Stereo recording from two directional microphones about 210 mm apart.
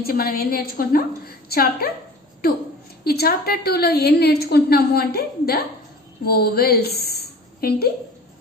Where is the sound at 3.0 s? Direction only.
50° left (ahead or behind).